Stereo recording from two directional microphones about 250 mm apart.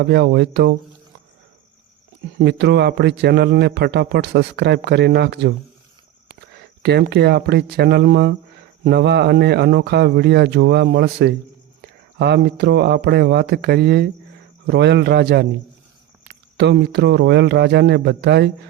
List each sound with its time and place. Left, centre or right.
0.0 s speech: right
2.4 s a man's voice: right
6.6 s a man's voice: right